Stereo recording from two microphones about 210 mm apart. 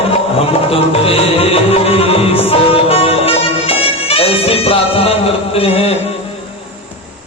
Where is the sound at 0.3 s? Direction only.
25° left (ahead or behind).